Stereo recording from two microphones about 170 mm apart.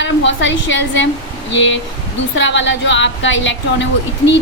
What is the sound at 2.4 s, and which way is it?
A woman's voice, 90° left.